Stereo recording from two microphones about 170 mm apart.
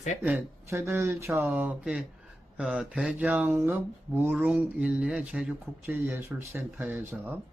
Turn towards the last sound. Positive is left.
turn(degrees=-10)  # may be behind; listen again after turning